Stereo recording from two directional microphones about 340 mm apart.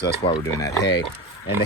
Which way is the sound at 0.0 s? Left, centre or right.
Left.